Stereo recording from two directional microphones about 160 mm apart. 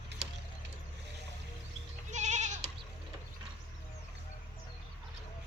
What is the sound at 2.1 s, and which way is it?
Goat, 50° right (ahead or behind).